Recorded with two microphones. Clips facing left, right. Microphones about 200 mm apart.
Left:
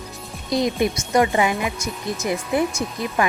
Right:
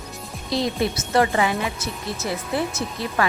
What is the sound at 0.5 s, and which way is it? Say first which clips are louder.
A woman's voice: left 3 dB; 15° left (ahead or behind).